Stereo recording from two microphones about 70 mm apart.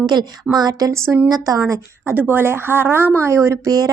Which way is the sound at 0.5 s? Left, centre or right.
Right.